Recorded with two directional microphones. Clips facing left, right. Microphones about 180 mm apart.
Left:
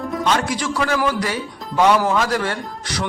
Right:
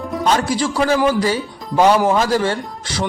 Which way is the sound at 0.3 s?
30° right (ahead or behind).